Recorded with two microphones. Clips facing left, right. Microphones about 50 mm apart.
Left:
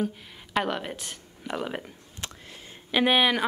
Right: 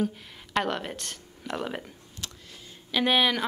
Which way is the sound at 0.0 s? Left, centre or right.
Centre.